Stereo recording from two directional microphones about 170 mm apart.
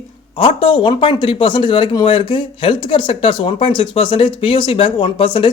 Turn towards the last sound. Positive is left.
turn(degrees=30)  # may be behind; listen again after turning